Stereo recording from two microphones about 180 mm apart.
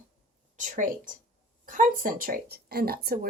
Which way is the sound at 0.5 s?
45° right (ahead or behind).